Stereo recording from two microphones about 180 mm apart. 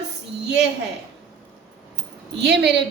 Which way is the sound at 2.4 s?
70° right (ahead or behind).